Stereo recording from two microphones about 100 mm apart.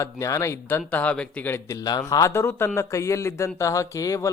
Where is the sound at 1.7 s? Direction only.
40° left (ahead or behind).